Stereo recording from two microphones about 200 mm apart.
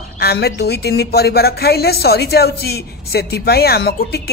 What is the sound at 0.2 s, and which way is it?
A woman's voice, 50° left (ahead or behind).